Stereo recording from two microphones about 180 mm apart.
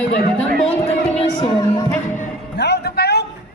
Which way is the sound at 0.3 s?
5° left (ahead or behind).